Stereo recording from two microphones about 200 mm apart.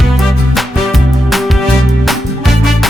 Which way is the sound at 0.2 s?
Centre (ahead or behind).